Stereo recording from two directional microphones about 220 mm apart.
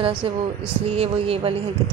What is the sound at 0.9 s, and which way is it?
Speech, 25° right (ahead or behind).